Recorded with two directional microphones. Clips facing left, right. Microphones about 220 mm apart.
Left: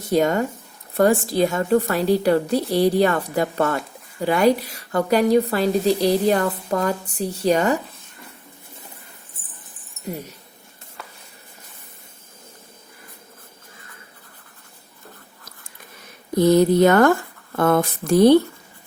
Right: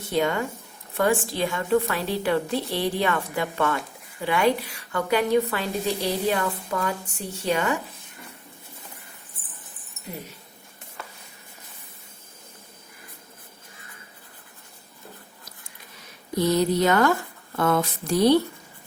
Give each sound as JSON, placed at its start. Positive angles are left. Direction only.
{"t": 0.1, "sound": "speech", "side_deg": 40}
{"t": 16.4, "sound": "speech", "side_deg": 50}